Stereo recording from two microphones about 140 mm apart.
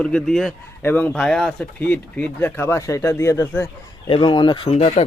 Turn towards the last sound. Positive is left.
turn(degrees=50)  # may be behind; listen again after turning